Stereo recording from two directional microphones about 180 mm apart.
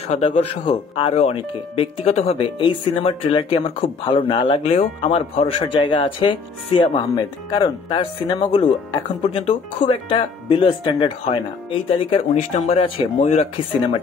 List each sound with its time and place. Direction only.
0.1 s speech: 40° left (ahead or behind)